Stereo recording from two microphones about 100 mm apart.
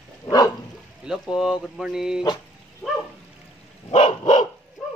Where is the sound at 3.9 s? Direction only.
60° left (ahead or behind).